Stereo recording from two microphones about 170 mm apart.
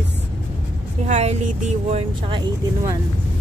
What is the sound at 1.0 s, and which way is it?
Speech, 40° right (ahead or behind).